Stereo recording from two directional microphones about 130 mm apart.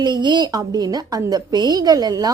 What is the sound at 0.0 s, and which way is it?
A woman's voice, 35° right (ahead or behind).